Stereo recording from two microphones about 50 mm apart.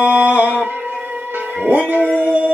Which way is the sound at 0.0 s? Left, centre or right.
Right.